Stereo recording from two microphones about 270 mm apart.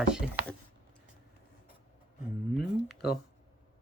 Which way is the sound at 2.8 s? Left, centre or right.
Left.